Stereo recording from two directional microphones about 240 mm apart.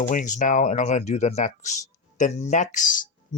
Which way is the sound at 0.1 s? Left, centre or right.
Left.